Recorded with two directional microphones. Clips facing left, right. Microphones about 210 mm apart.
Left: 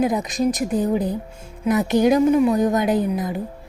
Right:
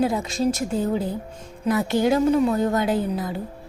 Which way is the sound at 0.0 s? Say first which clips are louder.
Left 2 dB; 15° left (ahead or behind).